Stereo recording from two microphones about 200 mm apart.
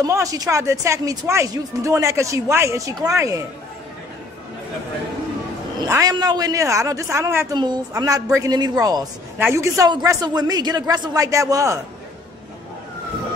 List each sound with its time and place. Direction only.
0.0 s speech: 15° right (ahead or behind)
5.8 s speech: 15° right (ahead or behind)